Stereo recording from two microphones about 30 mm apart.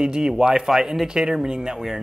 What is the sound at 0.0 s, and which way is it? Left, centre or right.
Speech, right.